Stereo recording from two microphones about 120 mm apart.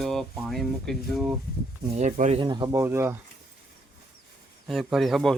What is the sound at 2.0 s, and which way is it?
Speech, 80° right.